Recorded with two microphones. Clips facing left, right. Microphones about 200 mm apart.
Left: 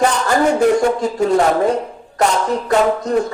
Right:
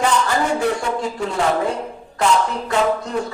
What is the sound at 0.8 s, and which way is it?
Speech, 40° left (ahead or behind).